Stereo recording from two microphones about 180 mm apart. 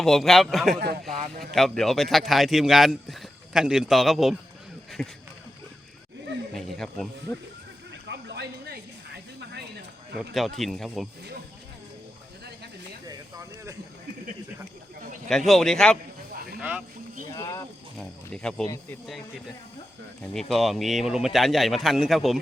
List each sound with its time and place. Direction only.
0.0 s speech: centre (ahead or behind)
0.8 s speech: 55° right (ahead or behind)
1.4 s speech: centre (ahead or behind)
6.5 s speech: centre (ahead or behind)
8.0 s a sound: 70° right (ahead or behind)
10.2 s speech: centre (ahead or behind)
15.3 s speech: centre (ahead or behind)
16.6 s speech: 10° right (ahead or behind)
17.3 s speech: 20° left (ahead or behind)
17.9 s speech: 5° left (ahead or behind)
20.2 s speech: centre (ahead or behind)